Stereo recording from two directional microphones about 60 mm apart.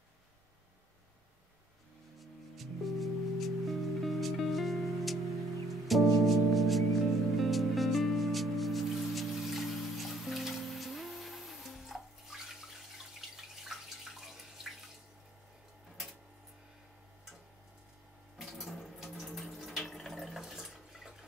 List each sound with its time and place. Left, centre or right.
2.1 s music: centre
18.4 s water: centre
20.3 s toilet flush: centre